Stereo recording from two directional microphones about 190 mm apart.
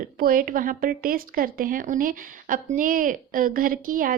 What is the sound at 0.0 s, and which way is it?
Speech, 50° right (ahead or behind).